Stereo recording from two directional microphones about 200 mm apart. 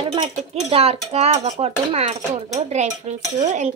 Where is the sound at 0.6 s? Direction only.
30° right (ahead or behind).